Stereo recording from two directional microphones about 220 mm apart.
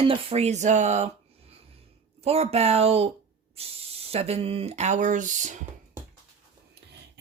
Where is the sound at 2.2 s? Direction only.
30° right (ahead or behind).